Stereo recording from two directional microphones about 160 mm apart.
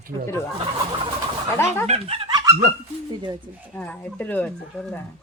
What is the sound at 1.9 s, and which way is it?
Speech, 40° right (ahead or behind).